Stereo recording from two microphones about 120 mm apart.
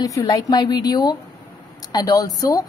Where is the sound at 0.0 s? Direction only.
30° left (ahead or behind).